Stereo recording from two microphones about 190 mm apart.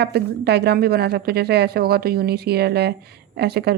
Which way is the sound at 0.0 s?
60° right (ahead or behind).